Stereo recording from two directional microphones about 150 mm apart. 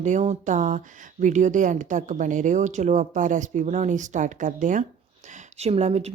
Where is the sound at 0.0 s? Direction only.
50° right (ahead or behind).